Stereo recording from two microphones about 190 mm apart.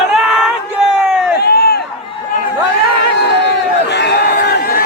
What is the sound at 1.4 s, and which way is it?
Run, 55° left (ahead or behind).